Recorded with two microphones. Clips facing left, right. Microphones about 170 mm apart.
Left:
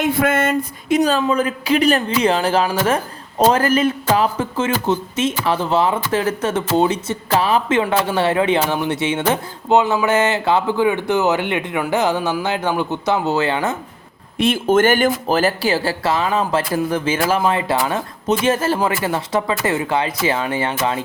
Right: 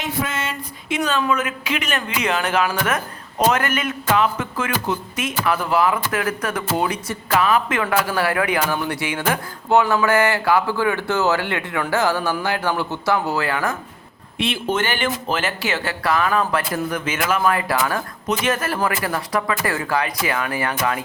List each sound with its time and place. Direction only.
0.0 s a sound: 55° left (ahead or behind); by 1.2 s 35° left (ahead or behind)
1.2 s a man's voice: 35° left (ahead or behind)
14.3 s speech: 45° left (ahead or behind); by 21.0 s 25° left (ahead or behind)